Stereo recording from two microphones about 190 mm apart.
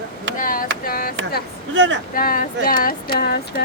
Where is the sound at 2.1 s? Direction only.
45° left (ahead or behind).